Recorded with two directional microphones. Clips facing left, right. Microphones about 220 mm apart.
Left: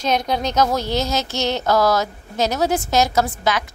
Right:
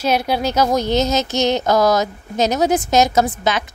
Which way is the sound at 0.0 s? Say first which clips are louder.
Right 2 dB; 10° right (ahead or behind).